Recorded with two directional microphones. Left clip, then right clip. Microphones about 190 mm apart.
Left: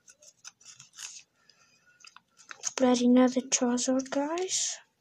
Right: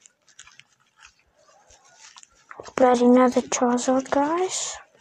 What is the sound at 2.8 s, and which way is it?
Speech, 20° right (ahead or behind).